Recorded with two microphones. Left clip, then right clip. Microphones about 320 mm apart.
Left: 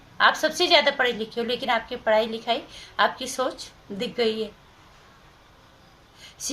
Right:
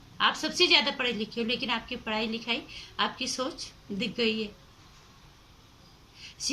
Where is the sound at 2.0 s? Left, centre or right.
Left.